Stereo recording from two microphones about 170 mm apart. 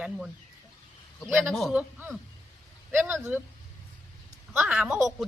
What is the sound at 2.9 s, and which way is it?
Speech, 10° right (ahead or behind).